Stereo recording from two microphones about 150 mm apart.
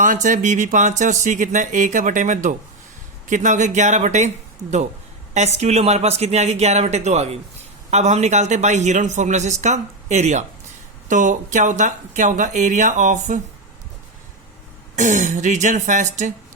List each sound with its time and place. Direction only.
0.0 s speech: 60° right (ahead or behind)
5.3 s a man's voice: 50° right (ahead or behind)
14.9 s speech: 55° right (ahead or behind)